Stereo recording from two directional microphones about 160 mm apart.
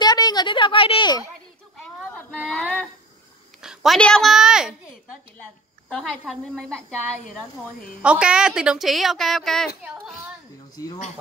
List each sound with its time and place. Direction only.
0.0 s speech: 25° left (ahead or behind)
1.8 s a sound: 5° left (ahead or behind)
3.6 s a woman's voice: centre (ahead or behind)
8.0 s a woman's voice: 5° right (ahead or behind)